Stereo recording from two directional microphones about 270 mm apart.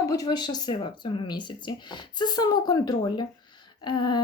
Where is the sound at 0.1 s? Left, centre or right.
Centre.